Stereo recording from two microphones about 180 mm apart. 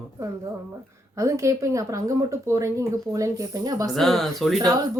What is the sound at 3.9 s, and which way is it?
Speech, centre (ahead or behind).